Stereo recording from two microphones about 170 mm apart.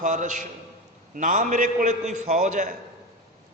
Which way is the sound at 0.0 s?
45° right (ahead or behind).